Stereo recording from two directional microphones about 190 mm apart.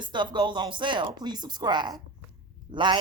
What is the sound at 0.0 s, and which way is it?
A woman's voice, 25° right (ahead or behind).